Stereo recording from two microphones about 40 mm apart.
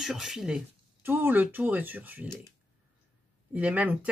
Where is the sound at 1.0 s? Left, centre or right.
Right.